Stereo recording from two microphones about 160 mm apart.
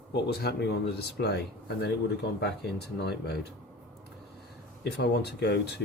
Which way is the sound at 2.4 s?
90° left.